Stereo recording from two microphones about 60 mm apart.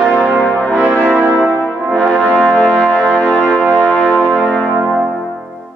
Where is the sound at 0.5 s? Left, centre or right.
Centre.